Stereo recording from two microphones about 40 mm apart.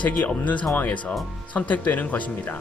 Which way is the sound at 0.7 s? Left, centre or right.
Left.